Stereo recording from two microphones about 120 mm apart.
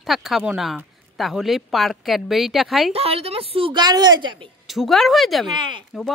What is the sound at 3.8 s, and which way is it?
Speech, 35° right (ahead or behind).